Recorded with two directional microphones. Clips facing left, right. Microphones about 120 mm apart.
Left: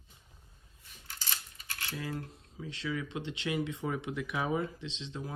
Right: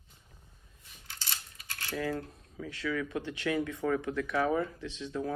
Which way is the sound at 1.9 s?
75° right (ahead or behind).